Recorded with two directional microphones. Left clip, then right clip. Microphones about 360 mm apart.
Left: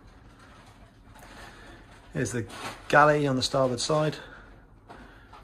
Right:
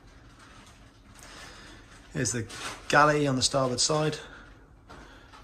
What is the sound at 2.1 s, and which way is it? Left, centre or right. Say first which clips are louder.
Speech: even; centre.